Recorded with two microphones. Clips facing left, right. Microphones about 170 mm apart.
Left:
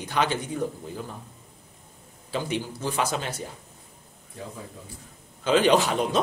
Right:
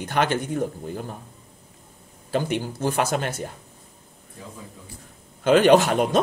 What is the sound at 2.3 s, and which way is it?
Speech, 55° right (ahead or behind).